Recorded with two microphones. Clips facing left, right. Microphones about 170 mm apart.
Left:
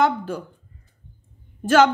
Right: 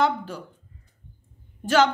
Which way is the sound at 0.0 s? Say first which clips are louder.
Left 3 dB; 50° left (ahead or behind).